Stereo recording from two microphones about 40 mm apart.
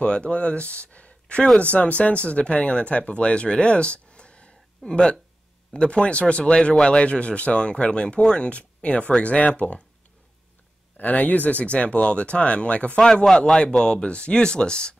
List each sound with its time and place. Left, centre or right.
0.0 s speech: left
11.0 s speech: left
13.3 s a man's voice: centre
13.6 s speech: left